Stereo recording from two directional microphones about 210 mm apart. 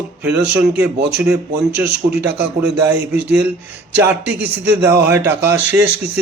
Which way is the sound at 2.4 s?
10° right (ahead or behind).